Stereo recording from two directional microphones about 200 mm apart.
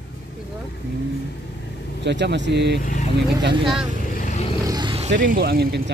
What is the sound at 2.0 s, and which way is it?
Speech, 60° right (ahead or behind).